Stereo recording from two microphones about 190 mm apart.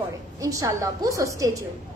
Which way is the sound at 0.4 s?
15° right (ahead or behind).